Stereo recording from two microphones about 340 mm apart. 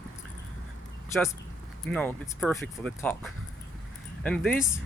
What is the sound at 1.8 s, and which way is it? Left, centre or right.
Speech, centre.